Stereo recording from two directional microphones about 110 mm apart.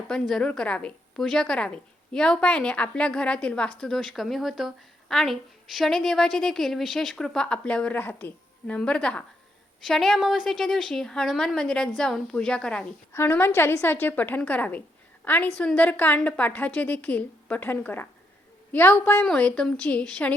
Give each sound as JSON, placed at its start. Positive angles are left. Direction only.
{"t": 0.1, "sound": "a woman's voice", "side_deg": 5}
{"t": 13.1, "sound": "a woman's voice", "side_deg": 20}